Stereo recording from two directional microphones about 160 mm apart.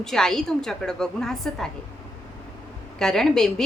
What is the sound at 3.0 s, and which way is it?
Speech, 5° left (ahead or behind).